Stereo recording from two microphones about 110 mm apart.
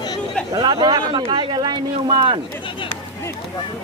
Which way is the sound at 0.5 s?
40° right (ahead or behind).